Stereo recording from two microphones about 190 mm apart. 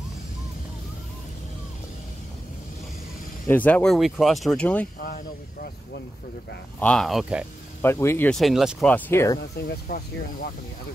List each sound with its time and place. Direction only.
3.4 s speech: 10° left (ahead or behind)
5.0 s speech: 50° left (ahead or behind)
6.8 s speech: 5° left (ahead or behind)
7.8 s speech: 15° left (ahead or behind)
8.4 s speech: centre (ahead or behind)
9.7 s speech: 50° left (ahead or behind)